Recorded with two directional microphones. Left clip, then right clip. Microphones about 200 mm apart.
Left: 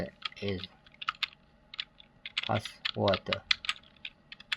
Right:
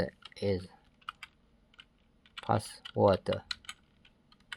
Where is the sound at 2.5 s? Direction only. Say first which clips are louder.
Right 4 dB; 25° right (ahead or behind).